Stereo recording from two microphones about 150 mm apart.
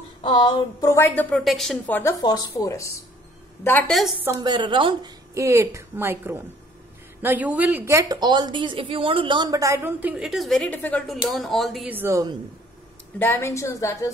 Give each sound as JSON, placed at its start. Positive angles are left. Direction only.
{"t": 0.2, "sound": "a woman's voice", "side_deg": 30}
{"t": 1.4, "sound": "speech", "side_deg": 0}
{"t": 1.9, "sound": "a woman's voice", "side_deg": 15}
{"t": 2.2, "sound": "a woman's voice", "side_deg": 25}
{"t": 4.4, "sound": "a woman's voice", "side_deg": -30}
{"t": 5.3, "sound": "a woman's voice", "side_deg": -20}
{"t": 11.9, "sound": "a woman's voice", "side_deg": -15}
{"t": 13.2, "sound": "a woman's voice", "side_deg": 15}